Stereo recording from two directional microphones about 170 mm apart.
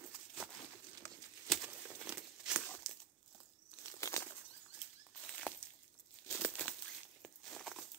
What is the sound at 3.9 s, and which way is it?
Bird flight, 20° left (ahead or behind).